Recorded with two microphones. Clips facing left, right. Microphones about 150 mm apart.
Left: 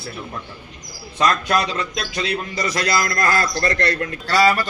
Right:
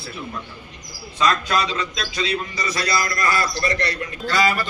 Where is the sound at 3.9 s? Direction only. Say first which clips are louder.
Left 5 dB; 55° left (ahead or behind).